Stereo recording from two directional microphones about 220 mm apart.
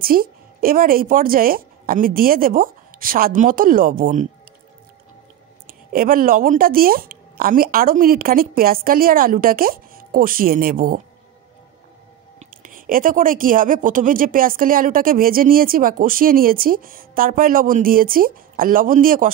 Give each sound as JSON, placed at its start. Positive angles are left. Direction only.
{"t": 0.0, "sound": "a woman's voice", "side_deg": -40}
{"t": 5.7, "sound": "a woman's voice", "side_deg": -40}
{"t": 12.4, "sound": "a woman's voice", "side_deg": -40}